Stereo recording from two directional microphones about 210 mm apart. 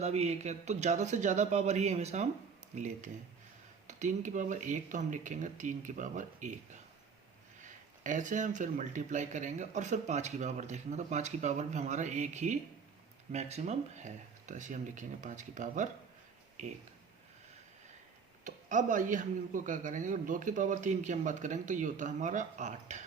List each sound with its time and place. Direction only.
0.0 s speech: 30° right (ahead or behind)
7.6 s speech: 35° right (ahead or behind)
18.4 s speech: 40° right (ahead or behind)